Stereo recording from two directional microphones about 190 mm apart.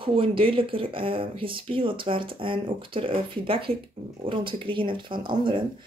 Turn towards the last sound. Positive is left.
turn(degrees=-25)  # may be behind; listen again after turning